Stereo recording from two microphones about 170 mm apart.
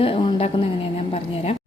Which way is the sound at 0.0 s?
30° left (ahead or behind).